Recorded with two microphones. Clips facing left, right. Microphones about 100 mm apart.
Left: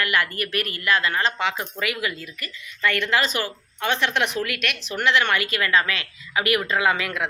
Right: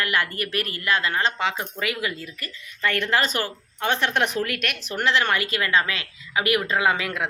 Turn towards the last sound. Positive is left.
turn(degrees=-30)  # may be behind; listen again after turning